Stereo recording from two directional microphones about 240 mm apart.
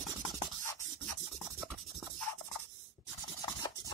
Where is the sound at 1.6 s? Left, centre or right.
Centre.